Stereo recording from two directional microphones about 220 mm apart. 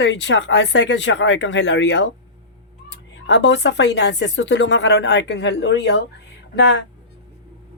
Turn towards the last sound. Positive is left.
turn(degrees=50)  # may be behind; listen again after turning